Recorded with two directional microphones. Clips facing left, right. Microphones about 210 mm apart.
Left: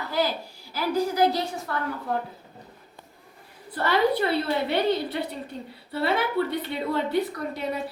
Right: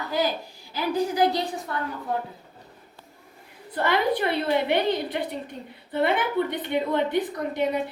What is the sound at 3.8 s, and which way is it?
A woman's voice, 15° right (ahead or behind).